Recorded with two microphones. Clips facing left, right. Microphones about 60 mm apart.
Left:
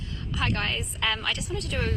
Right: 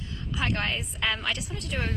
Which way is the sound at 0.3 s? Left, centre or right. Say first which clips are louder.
Even; centre.